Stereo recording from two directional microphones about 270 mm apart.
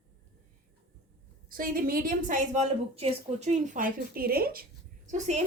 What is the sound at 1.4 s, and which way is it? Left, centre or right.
A woman's voice, right.